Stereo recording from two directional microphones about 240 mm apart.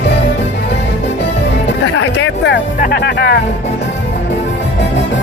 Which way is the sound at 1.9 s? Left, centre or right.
Left.